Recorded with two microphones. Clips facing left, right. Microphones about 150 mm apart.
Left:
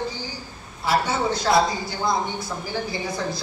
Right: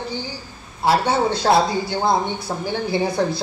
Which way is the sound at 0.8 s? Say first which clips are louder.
Right 4 dB; 65° right (ahead or behind).